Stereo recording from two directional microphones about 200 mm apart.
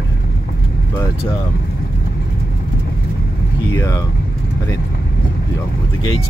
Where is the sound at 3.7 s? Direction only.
15° left (ahead or behind).